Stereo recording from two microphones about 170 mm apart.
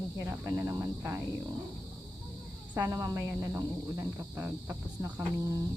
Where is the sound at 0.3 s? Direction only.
20° right (ahead or behind).